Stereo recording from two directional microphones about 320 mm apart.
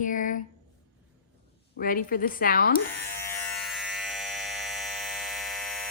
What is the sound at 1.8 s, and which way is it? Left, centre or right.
Speech, left.